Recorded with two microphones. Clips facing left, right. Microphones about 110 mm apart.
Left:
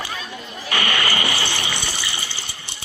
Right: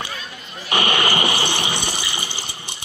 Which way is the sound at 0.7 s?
20° right (ahead or behind).